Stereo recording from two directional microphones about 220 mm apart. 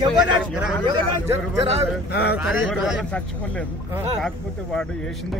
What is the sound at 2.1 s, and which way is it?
Speech, 50° left (ahead or behind).